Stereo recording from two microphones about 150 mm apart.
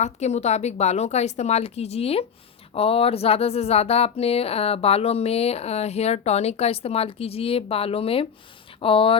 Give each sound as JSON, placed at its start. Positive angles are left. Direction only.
{"t": 0.0, "sound": "speech", "side_deg": 50}